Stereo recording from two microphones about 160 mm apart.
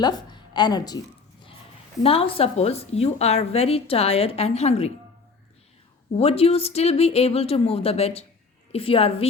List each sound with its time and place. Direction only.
0.0 s a woman's voice: 25° left (ahead or behind)
2.0 s a woman's voice: 35° left (ahead or behind)
6.1 s a woman's voice: 40° left (ahead or behind)